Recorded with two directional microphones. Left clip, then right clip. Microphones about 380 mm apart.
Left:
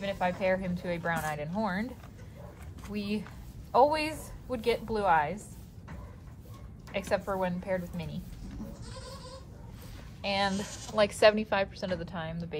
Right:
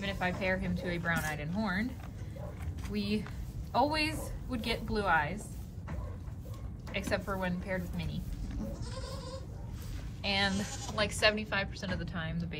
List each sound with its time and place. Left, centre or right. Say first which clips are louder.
0.0 s speech: left 4 dB; centre
2.9 s speech: even; centre
6.9 s speech: left 4 dB; centre
10.2 s speech: left 2 dB; centre
10.7 s a woman's voice: even; centre
11.0 s speech: left 6 dB; centre